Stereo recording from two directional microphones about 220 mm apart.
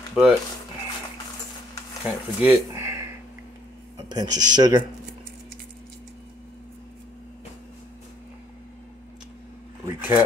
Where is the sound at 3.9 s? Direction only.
15° right (ahead or behind).